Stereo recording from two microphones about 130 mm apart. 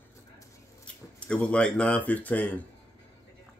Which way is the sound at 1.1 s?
10° left (ahead or behind).